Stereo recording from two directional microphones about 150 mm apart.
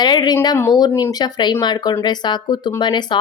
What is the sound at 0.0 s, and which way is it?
Speech, 30° left (ahead or behind).